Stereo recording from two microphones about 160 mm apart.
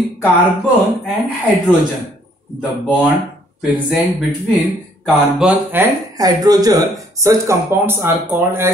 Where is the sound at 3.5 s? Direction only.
Centre (ahead or behind).